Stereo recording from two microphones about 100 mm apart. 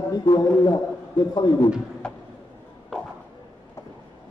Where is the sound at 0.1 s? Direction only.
40° left (ahead or behind).